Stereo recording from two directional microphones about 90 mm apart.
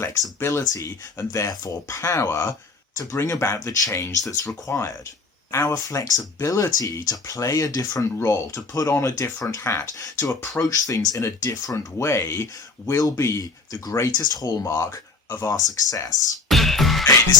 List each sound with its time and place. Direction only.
0.3 s speech: 30° left (ahead or behind)
5.5 s speech: 25° left (ahead or behind)
5.9 s speech: 40° left (ahead or behind)
10.5 s speech: 40° left (ahead or behind)
14.7 s speech: 30° left (ahead or behind)
16.5 s music: centre (ahead or behind)